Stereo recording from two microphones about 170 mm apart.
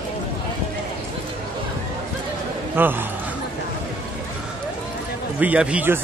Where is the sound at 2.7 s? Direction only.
10° right (ahead or behind).